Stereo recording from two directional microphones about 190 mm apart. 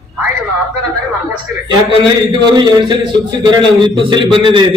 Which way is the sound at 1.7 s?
25° right (ahead or behind).